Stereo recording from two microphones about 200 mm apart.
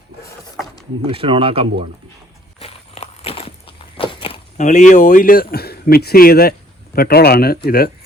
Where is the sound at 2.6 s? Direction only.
30° left (ahead or behind); by 6.5 s 50° left (ahead or behind).